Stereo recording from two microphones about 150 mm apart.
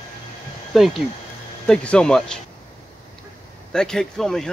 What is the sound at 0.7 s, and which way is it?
Speech, centre (ahead or behind).